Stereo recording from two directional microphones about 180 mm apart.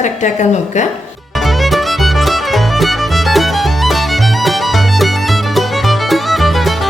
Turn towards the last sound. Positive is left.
turn(degrees=0)  # may be behind; listen again after turning